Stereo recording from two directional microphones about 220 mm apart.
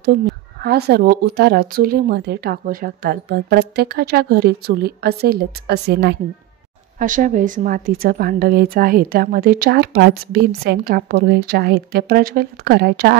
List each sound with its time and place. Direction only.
0.6 s a woman's voice: 45° right (ahead or behind)